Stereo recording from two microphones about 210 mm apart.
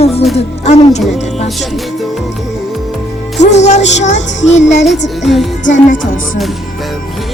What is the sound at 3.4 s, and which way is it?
Speech, 30° left (ahead or behind).